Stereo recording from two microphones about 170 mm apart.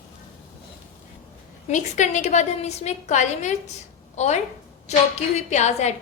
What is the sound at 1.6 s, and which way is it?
A woman's voice, 45° left (ahead or behind).